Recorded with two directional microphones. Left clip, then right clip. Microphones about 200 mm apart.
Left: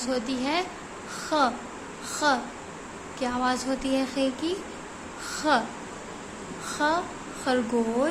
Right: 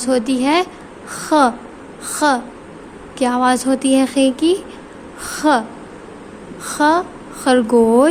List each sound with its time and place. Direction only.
0.0 s a woman's voice: 40° right (ahead or behind)
5.2 s a sound: 40° right (ahead or behind)
6.7 s a woman's voice: 40° right (ahead or behind)